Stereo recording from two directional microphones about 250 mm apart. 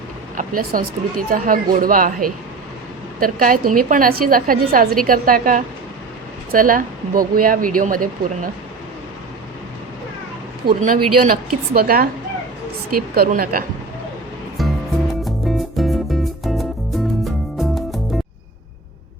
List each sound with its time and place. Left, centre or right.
0.3 s speech: right
3.2 s speech: right
10.7 s speech: right
13.1 s speech: right
14.6 s music: centre